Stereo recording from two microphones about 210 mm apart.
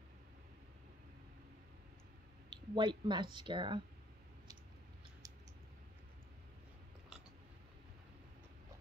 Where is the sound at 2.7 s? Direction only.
20° right (ahead or behind).